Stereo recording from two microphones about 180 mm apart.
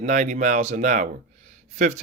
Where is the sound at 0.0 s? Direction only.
45° right (ahead or behind).